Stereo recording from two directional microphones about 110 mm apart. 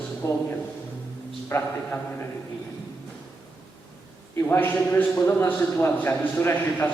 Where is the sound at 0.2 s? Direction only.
25° left (ahead or behind).